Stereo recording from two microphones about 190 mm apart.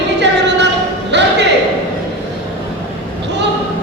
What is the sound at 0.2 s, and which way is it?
Music, 65° right (ahead or behind).